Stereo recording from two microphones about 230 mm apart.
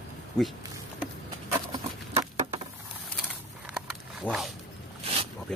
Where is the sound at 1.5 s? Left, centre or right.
Centre.